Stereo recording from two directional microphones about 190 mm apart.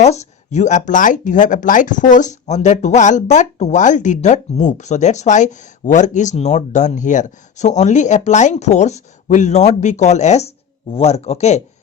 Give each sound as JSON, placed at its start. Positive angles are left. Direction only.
{"t": 0.0, "sound": "speech", "side_deg": 35}